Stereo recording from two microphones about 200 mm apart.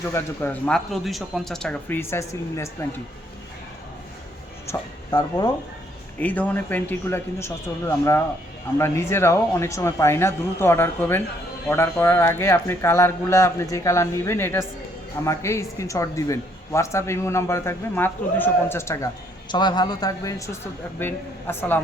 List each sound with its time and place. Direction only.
0.1 s speech: 10° left (ahead or behind)
4.7 s speech: 15° left (ahead or behind)